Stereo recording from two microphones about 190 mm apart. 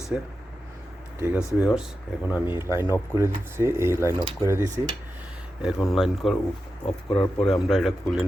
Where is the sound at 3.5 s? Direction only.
15° right (ahead or behind).